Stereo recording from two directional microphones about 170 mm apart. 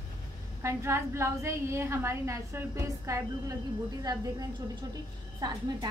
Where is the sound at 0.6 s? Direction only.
15° right (ahead or behind).